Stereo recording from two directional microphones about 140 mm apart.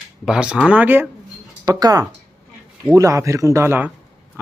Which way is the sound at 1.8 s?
30° right (ahead or behind).